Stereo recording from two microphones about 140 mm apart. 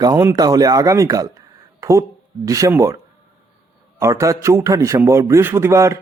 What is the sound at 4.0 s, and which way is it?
Speech, 20° right (ahead or behind).